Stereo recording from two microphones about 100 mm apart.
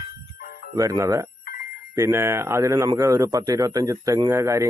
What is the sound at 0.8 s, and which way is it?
Speech, 35° right (ahead or behind).